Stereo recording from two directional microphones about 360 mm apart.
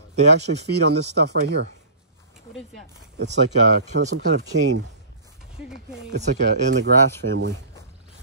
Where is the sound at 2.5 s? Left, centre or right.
Centre.